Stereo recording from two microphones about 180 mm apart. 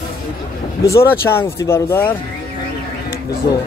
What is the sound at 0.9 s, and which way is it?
Speech, 15° left (ahead or behind).